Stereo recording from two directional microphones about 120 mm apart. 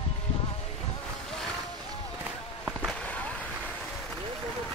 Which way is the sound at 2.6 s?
10° left (ahead or behind).